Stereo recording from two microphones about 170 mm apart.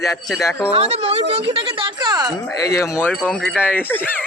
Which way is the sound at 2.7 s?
15° left (ahead or behind).